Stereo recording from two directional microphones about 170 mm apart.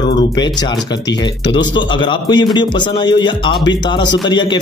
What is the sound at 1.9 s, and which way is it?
Speech, 30° left (ahead or behind).